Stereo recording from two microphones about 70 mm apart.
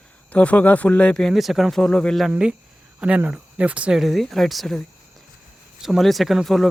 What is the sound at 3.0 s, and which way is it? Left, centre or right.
Speech, centre.